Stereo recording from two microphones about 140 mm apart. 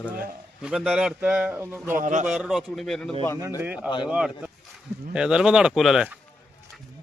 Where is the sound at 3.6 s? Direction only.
10° right (ahead or behind).